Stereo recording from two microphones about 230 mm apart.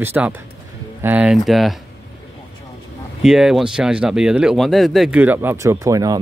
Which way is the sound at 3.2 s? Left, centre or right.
Centre.